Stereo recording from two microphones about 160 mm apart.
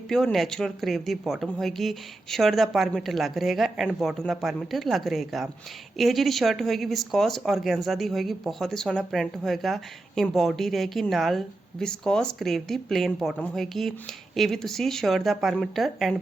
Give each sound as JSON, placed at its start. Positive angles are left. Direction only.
{"t": 0.1, "sound": "speech", "side_deg": 0}